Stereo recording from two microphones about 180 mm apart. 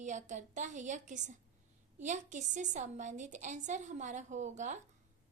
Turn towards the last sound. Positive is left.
turn(degrees=-40)  # may be behind; listen again after turning